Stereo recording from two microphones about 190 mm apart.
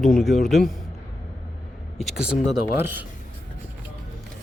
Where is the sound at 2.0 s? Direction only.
Centre (ahead or behind).